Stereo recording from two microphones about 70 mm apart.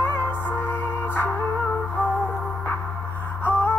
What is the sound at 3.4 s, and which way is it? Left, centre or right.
Music, left.